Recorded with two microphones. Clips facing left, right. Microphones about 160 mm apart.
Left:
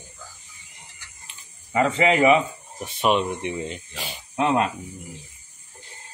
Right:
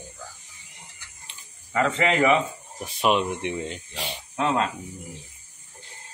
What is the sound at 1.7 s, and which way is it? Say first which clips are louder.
Speech: left 3 dB; 10° left (ahead or behind).